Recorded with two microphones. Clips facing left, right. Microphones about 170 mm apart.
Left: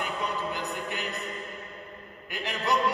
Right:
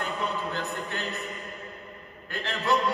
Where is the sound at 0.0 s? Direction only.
15° left (ahead or behind).